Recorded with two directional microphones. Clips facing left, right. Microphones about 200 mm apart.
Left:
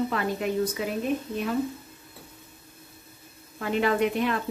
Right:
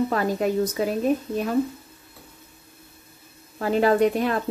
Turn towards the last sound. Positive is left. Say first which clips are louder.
# right 4 dB
turn(degrees=-40)  # may be behind; listen again after turning